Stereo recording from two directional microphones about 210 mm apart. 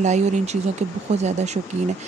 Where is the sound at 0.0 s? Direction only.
35° right (ahead or behind).